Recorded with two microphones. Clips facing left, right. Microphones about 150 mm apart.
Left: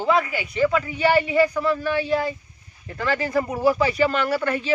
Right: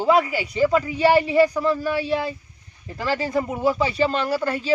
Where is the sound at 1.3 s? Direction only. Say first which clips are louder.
Right 2 dB; 15° right (ahead or behind).